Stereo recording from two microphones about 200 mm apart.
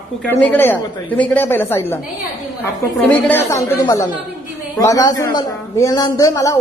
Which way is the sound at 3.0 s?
10° left (ahead or behind).